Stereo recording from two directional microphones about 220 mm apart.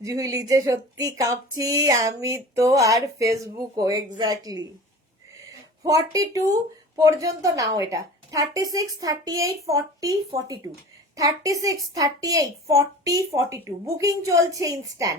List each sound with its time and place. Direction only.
0.0 s speech: 15° right (ahead or behind)
5.8 s speech: 15° right (ahead or behind)